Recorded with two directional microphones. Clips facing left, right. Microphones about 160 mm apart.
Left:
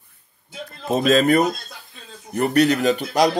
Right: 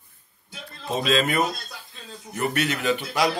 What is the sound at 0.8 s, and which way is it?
A man's voice, 45° left (ahead or behind).